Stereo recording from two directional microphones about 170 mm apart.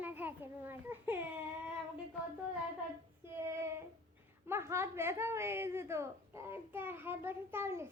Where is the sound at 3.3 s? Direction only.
15° right (ahead or behind).